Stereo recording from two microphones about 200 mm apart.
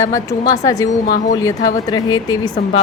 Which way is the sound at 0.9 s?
40° left (ahead or behind).